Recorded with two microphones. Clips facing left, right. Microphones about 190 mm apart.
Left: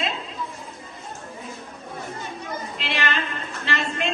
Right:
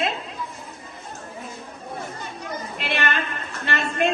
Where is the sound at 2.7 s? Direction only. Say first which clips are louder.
Right 2 dB; 55° right (ahead or behind).